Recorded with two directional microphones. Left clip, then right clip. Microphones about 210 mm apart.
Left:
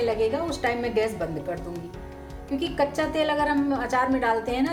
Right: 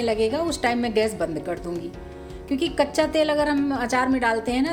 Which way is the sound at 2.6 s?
55° right (ahead or behind).